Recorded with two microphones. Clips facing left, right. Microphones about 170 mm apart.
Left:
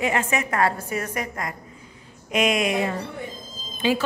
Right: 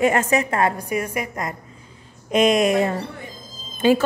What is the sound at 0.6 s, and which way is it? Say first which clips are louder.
Speech: right 2 dB; 15° right (ahead or behind).